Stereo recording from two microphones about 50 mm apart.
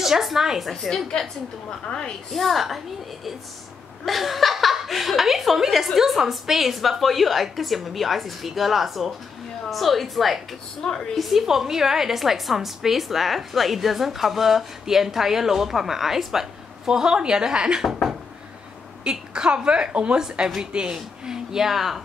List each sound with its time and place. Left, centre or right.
0.0 s speech: centre
0.8 s a woman's voice: centre
2.3 s speech: centre
4.0 s speech: centre
10.8 s a woman's voice: centre
11.1 s a woman's voice: centre
19.0 s a woman's voice: centre